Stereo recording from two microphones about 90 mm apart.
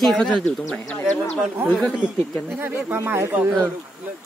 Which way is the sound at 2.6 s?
25° right (ahead or behind).